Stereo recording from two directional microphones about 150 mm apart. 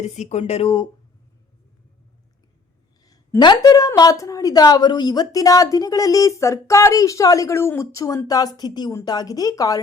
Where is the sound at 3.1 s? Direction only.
25° left (ahead or behind).